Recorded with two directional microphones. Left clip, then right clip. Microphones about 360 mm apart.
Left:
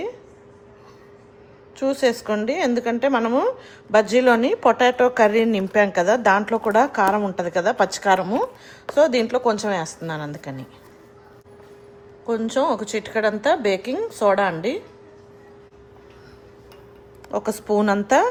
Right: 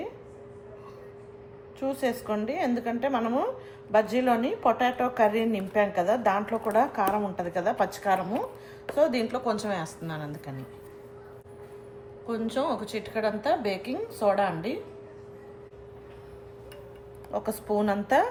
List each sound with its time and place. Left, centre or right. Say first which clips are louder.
1.8 s a woman's voice: left 9 dB; left
12.2 s a woman's voice: left 8 dB; centre
17.3 s a woman's voice: left 7 dB; left